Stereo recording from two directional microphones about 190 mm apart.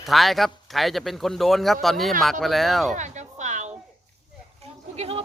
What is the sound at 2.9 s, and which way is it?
Music, 40° right (ahead or behind).